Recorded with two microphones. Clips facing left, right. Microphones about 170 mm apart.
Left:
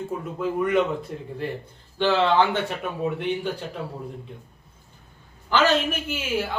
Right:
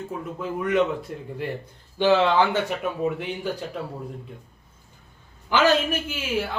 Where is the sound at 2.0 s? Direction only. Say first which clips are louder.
Right 1 dB; 10° right (ahead or behind).